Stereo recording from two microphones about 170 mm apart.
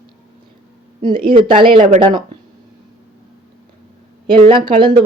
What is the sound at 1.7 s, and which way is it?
Speech, 50° right (ahead or behind).